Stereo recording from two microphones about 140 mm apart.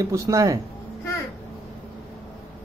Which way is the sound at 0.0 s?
25° right (ahead or behind).